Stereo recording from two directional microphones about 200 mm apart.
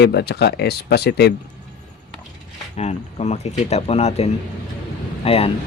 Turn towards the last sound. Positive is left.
turn(degrees=30)  # may be behind; listen again after turning